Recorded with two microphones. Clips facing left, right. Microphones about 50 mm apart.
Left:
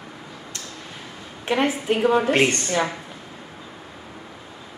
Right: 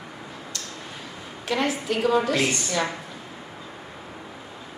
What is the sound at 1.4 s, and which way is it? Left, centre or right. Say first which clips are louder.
Speech: left 3 dB; left.